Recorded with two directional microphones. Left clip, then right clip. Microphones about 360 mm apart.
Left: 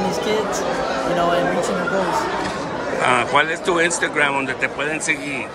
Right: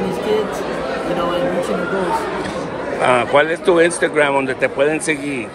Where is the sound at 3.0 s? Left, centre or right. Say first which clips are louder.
Right 3 dB; centre.